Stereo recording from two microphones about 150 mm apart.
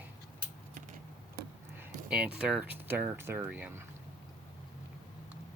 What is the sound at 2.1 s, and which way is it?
Speech, 5° right (ahead or behind).